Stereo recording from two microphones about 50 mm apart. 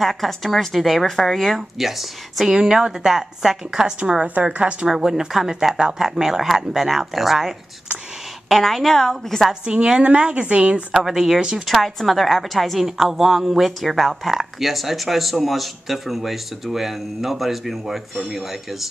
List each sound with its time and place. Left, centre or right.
0.0 s speech: centre
2.5 s a woman's voice: centre
4.8 s speech: centre
9.5 s a woman's voice: centre
11.0 s speech: centre
11.6 s speech: centre